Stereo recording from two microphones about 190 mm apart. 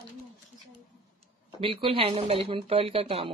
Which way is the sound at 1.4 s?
25° right (ahead or behind).